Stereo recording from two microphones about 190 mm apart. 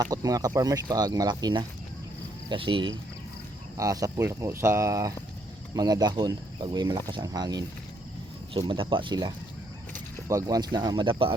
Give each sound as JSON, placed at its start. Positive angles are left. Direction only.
{"t": 0.0, "sound": "speech", "side_deg": -20}